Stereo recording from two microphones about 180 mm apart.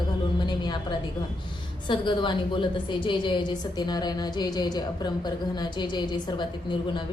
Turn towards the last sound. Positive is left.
turn(degrees=25)  # may be behind; listen again after turning